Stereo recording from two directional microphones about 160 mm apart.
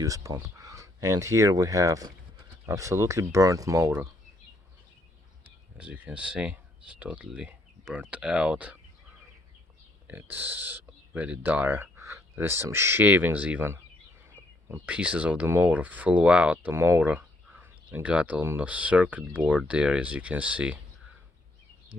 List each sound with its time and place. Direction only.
0.0 s speech: 20° right (ahead or behind)
5.4 s speech: 10° right (ahead or behind)
10.1 s speech: 10° right (ahead or behind)